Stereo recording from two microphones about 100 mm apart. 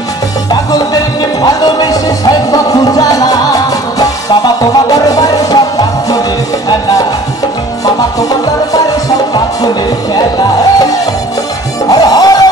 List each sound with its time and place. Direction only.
0.5 s music: 40° left (ahead or behind)
7.8 s music: 40° left (ahead or behind)
11.9 s music: 40° left (ahead or behind)